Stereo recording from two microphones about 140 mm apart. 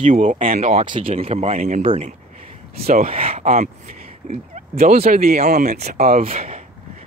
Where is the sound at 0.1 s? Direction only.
70° right (ahead or behind).